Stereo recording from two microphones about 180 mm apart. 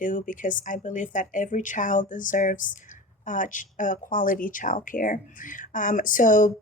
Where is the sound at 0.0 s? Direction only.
45° left (ahead or behind).